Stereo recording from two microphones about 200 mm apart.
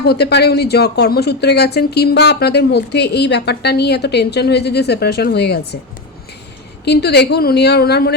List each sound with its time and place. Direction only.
0.0 s speech: 55° left (ahead or behind)
6.8 s speech: 55° left (ahead or behind)